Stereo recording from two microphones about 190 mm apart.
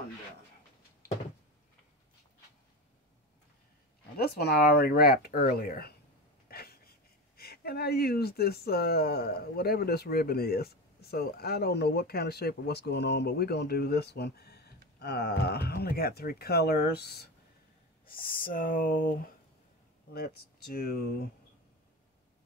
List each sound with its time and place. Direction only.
4.2 s speech: 55° left (ahead or behind)